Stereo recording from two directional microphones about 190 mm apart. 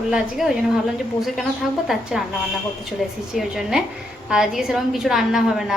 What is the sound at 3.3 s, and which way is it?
A woman's voice, centre (ahead or behind).